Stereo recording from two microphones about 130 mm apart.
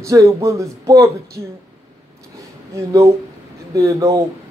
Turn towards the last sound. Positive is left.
turn(degrees=-25)  # may be behind; listen again after turning